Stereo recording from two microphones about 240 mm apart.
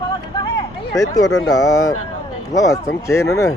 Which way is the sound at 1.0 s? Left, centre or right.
Centre.